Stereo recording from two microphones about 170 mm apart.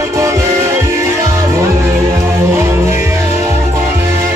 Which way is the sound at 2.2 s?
15° right (ahead or behind).